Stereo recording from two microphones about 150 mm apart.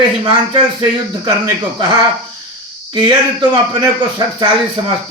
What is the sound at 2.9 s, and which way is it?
Speech, 30° right (ahead or behind).